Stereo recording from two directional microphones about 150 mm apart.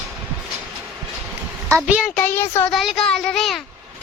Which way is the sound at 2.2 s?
15° left (ahead or behind).